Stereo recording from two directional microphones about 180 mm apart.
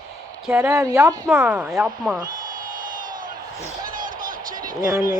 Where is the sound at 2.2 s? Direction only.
50° right (ahead or behind).